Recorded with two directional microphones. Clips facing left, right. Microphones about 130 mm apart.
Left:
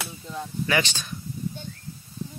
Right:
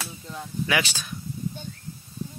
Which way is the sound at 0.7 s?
5° right (ahead or behind).